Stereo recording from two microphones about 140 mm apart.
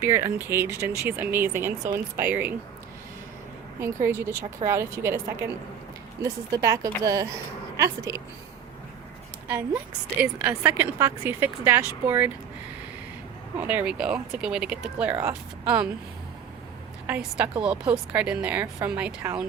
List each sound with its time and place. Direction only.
0.0 s a woman's voice: 20° right (ahead or behind)
3.8 s a woman's voice: 20° right (ahead or behind)
10.2 s a woman's voice: 10° right (ahead or behind)
13.6 s a woman's voice: 10° right (ahead or behind)
17.1 s a woman's voice: 10° right (ahead or behind)